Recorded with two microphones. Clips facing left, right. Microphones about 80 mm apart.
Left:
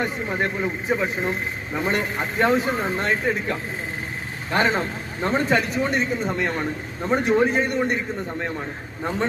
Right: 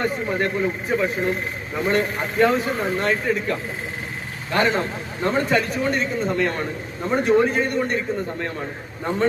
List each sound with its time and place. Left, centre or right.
0.0 s speech: centre
4.5 s speech: left